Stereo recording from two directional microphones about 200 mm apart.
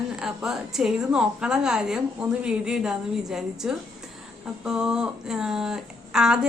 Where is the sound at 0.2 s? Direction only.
Centre (ahead or behind).